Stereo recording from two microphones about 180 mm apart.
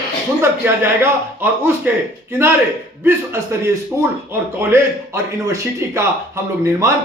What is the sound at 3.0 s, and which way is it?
Speech, 15° right (ahead or behind).